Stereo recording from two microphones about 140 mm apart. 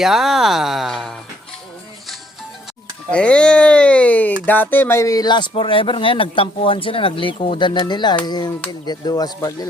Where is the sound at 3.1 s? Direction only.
10° left (ahead or behind).